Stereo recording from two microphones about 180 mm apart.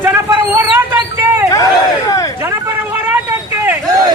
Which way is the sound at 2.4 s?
10° right (ahead or behind).